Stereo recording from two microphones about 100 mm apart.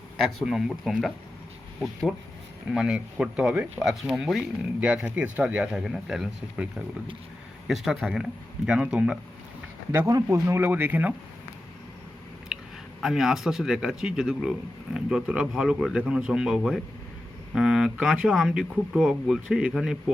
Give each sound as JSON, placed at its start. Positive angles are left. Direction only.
{"t": 0.2, "sound": "speech", "side_deg": 0}
{"t": 2.7, "sound": "speech", "side_deg": -10}
{"t": 10.1, "sound": "speech", "side_deg": -35}
{"t": 12.5, "sound": "a sound", "side_deg": -5}
{"t": 13.0, "sound": "speech", "side_deg": -5}